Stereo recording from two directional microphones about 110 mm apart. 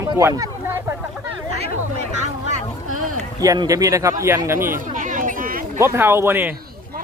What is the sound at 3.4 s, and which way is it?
Speech, 35° right (ahead or behind).